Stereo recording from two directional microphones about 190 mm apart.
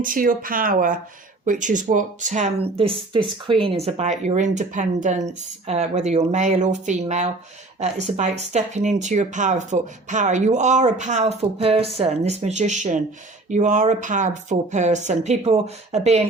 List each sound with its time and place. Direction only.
0.0 s speech: 45° right (ahead or behind)